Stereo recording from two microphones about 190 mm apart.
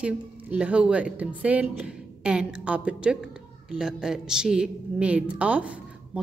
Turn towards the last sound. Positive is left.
turn(degrees=-5)  # may be behind; listen again after turning